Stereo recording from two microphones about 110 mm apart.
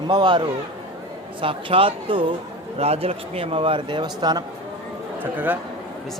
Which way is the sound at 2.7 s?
70° right (ahead or behind).